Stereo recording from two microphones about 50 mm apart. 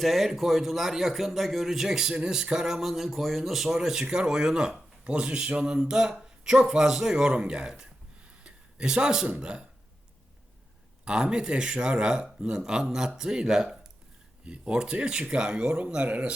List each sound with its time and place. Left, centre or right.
0.0 s a man's voice: centre
8.4 s a sound: centre
9.4 s speech: centre
11.0 s speech: centre